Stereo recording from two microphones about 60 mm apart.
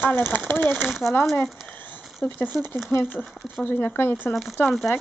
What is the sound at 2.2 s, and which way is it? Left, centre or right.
Speech, left.